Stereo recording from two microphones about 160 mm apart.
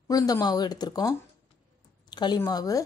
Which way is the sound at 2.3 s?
25° left (ahead or behind).